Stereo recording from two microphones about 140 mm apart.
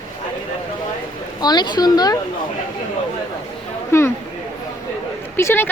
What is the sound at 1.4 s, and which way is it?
Speech, 30° left (ahead or behind).